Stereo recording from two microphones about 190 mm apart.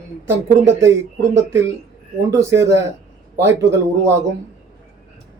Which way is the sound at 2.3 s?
15° right (ahead or behind).